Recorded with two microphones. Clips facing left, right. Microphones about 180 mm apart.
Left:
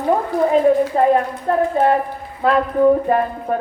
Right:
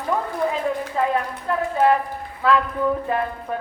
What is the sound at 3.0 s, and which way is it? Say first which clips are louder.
Speech: left 6 dB; 40° left (ahead or behind).